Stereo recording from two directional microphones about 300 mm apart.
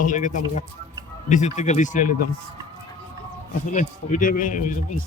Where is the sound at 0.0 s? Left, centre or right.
Left.